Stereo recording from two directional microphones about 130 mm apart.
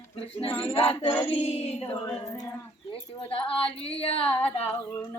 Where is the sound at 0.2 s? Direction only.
45° left (ahead or behind).